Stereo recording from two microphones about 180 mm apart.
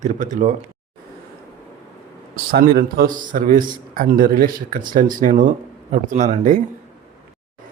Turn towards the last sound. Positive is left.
turn(degrees=-45)  # may be behind; listen again after turning